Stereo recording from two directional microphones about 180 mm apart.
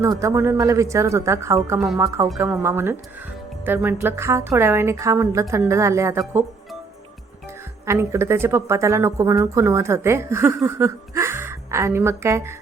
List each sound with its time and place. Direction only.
0.0 s speech: 15° right (ahead or behind)
7.9 s speech: 15° right (ahead or behind)